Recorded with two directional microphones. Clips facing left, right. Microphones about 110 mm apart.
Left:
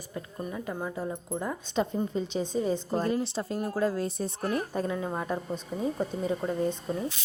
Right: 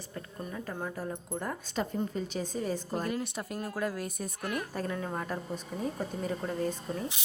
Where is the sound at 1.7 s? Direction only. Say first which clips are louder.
Left 5 dB; 25° left (ahead or behind).